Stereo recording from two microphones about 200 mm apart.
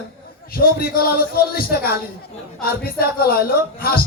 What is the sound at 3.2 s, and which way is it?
Speech, 50° left (ahead or behind).